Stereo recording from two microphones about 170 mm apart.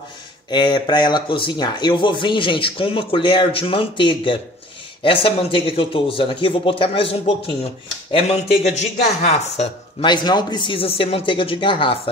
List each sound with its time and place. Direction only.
0.5 s speech: 25° left (ahead or behind)
10.0 s speech: 25° left (ahead or behind)